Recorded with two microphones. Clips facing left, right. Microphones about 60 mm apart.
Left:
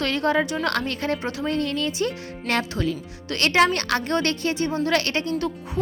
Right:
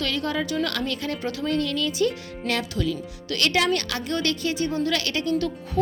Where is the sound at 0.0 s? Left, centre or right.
Left.